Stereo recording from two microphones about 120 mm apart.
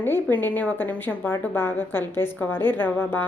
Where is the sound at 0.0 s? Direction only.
15° left (ahead or behind).